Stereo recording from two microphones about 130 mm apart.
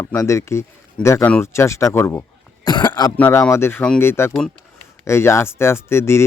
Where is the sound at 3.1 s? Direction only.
15° left (ahead or behind).